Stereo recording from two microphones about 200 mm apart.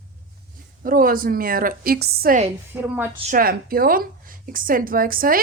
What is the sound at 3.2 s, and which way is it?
A woman's voice, 45° right (ahead or behind).